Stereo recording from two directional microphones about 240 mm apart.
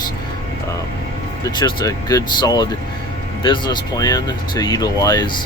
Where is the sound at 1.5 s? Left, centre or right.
Centre.